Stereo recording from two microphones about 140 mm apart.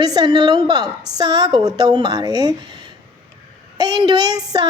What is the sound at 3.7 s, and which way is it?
Speech, 30° right (ahead or behind).